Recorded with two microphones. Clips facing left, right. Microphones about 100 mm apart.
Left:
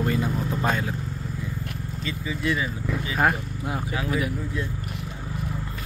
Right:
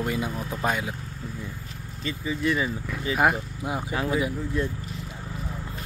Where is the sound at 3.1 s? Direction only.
15° right (ahead or behind).